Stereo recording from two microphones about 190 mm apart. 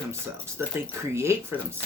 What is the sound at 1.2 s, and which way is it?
Speech, 15° right (ahead or behind).